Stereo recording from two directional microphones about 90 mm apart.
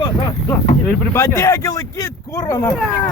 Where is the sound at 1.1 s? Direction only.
35° left (ahead or behind).